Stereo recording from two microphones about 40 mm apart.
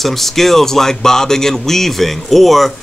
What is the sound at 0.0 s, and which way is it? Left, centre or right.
Speech, centre.